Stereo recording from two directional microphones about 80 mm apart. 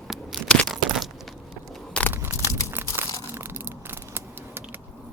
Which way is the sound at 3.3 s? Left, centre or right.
Right.